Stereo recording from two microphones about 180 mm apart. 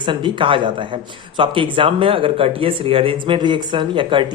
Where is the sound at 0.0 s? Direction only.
25° right (ahead or behind).